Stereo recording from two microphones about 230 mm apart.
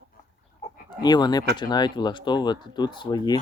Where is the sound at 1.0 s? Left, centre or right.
Centre.